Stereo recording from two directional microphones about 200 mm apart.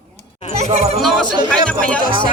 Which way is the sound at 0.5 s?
35° right (ahead or behind).